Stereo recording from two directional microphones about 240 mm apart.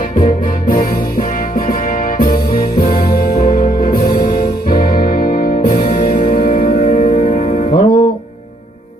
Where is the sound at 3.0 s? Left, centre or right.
Left.